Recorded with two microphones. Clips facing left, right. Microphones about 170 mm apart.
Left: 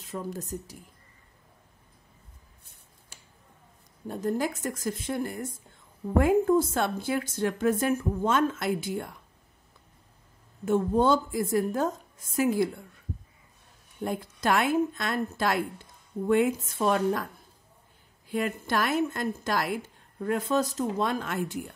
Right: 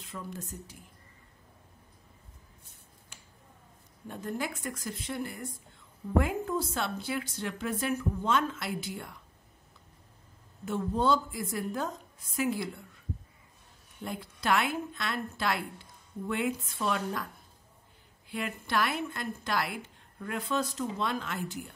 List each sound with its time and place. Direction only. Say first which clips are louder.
0.0 s a woman's voice: left 6 dB; 40° left (ahead or behind)
4.1 s a woman's voice: left 7 dB; 40° left (ahead or behind)
10.6 s a woman's voice: left 6 dB; 50° left (ahead or behind)
14.0 s a woman's voice: left 4 dB; 45° left (ahead or behind)
18.3 s a woman's voice: left 4 dB; 45° left (ahead or behind)